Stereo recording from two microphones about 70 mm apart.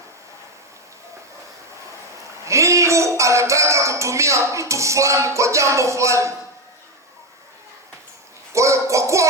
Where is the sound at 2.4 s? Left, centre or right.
Right.